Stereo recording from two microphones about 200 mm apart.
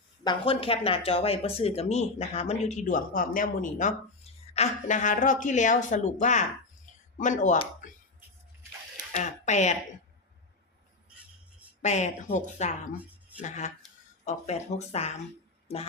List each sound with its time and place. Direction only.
0.3 s speech: 25° left (ahead or behind)
9.1 s speech: 35° left (ahead or behind)
11.8 s speech: 35° left (ahead or behind)
15.6 s music: 30° left (ahead or behind)